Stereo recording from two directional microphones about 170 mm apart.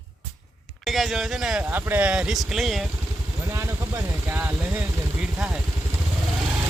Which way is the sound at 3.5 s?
15° right (ahead or behind).